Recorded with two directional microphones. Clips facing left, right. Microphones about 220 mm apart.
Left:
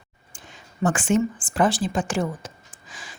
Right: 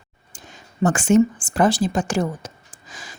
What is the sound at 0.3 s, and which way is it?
A woman's voice, 40° right (ahead or behind).